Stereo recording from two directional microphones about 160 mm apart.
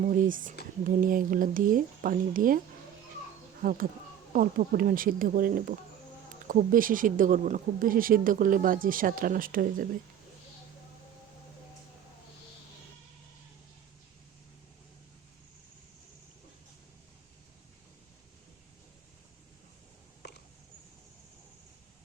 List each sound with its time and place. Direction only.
0.1 s speech: 55° right (ahead or behind)
3.6 s speech: 60° right (ahead or behind)